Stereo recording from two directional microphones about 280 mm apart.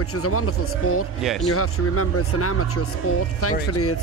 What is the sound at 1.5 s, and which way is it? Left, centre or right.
Speech, left.